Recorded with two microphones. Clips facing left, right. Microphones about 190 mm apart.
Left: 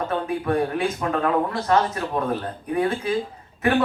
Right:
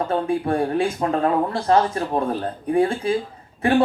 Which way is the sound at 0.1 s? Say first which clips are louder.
Right 1 dB; 30° right (ahead or behind).